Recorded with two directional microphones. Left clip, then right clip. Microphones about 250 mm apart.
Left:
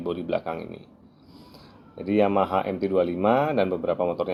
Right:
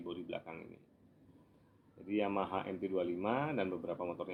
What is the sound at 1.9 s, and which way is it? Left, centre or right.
Speech, left.